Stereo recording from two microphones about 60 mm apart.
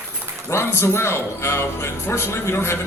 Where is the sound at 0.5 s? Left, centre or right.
Left.